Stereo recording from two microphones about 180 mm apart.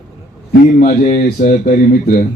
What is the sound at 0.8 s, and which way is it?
Speech, 45° left (ahead or behind).